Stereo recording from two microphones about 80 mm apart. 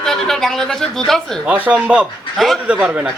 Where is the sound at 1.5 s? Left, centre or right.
Centre.